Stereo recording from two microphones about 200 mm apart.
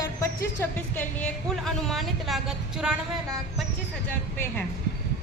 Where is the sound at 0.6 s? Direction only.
10° left (ahead or behind).